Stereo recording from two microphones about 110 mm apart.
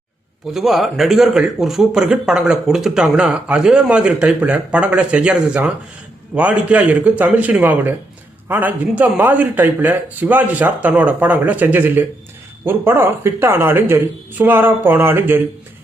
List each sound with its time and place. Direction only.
0.5 s speech: centre (ahead or behind); by 15.4 s 20° right (ahead or behind)